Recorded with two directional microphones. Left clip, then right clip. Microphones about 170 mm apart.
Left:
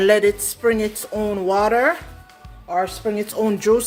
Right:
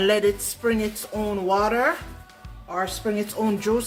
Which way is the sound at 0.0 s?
40° left (ahead or behind).